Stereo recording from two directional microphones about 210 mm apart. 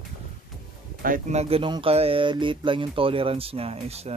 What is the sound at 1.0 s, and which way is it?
Speech, 35° right (ahead or behind).